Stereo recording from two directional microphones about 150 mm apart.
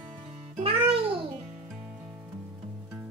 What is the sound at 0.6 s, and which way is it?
Music, 40° right (ahead or behind).